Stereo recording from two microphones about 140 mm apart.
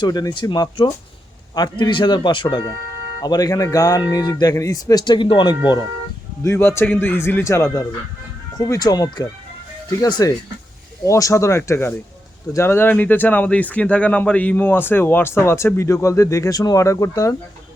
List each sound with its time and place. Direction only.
0.0 s speech: 30° left (ahead or behind)
6.4 s speech: 20° left (ahead or behind)